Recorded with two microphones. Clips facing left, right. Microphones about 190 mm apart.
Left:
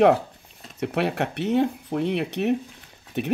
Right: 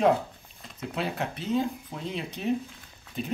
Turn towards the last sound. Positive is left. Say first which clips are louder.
# left 7 dB
turn(degrees=70)  # may be behind; listen again after turning